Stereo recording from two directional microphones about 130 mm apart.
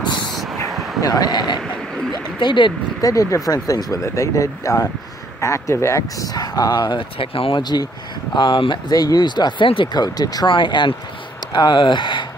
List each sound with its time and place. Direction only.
0.3 s vehicle: centre (ahead or behind)
1.0 s speech: 30° left (ahead or behind)
1.6 s a sound: 5° left (ahead or behind)
2.4 s speech: 35° left (ahead or behind)
3.1 s speech: 25° left (ahead or behind); by 7.6 s 45° left (ahead or behind)
7.6 s speech: 30° left (ahead or behind)